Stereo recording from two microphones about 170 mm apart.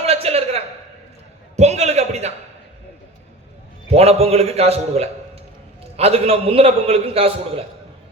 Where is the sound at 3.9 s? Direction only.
35° right (ahead or behind).